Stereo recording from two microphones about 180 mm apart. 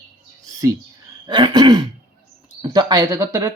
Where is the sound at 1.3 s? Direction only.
25° right (ahead or behind).